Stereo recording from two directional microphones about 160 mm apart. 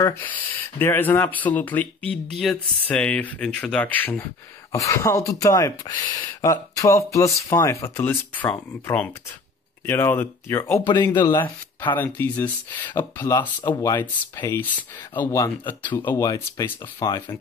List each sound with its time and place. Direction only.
0.0 s speech: 15° left (ahead or behind)
10.9 s speech: 25° left (ahead or behind)
11.9 s speech: 10° left (ahead or behind)
14.6 s speech: 10° left (ahead or behind)
16.1 s speech: 20° left (ahead or behind)